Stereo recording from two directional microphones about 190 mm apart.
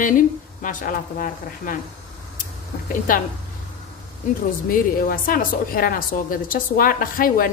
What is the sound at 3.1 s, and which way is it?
Speech, 45° left (ahead or behind).